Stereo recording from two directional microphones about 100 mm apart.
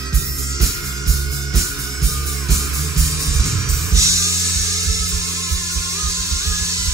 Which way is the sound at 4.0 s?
30° right (ahead or behind).